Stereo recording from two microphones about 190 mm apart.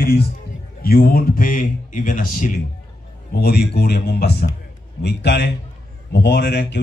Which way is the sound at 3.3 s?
55° left (ahead or behind).